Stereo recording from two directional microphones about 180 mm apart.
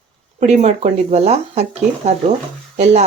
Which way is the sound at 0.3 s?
40° right (ahead or behind).